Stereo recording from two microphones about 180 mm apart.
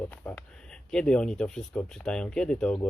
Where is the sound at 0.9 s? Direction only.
5° left (ahead or behind).